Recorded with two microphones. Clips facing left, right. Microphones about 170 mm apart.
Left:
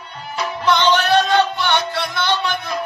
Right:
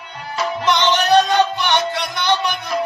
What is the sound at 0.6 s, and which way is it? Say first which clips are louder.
Music: left 1 dB; 20° right (ahead or behind).